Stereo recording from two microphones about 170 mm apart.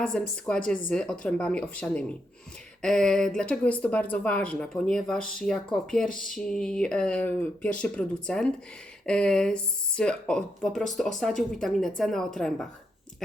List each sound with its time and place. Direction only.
0.1 s speech: 5° left (ahead or behind)
6.1 s speech: 55° left (ahead or behind)
6.3 s speech: 5° left (ahead or behind)